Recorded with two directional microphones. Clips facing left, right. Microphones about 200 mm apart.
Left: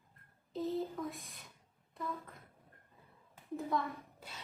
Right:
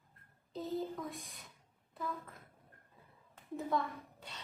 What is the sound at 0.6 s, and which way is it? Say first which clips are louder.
Speech: left 2 dB; centre (ahead or behind).